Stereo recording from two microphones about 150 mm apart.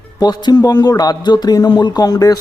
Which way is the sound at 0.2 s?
30° left (ahead or behind).